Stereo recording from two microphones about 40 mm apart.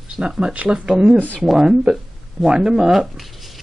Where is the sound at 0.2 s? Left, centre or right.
Right; by 3.6 s centre.